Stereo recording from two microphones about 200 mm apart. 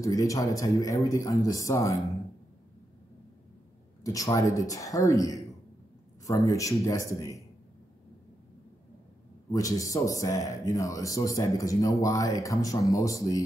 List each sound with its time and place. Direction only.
0.0 s a man's voice: 15° left (ahead or behind)
4.0 s a man's voice: 15° left (ahead or behind)
9.5 s a man's voice: 15° left (ahead or behind)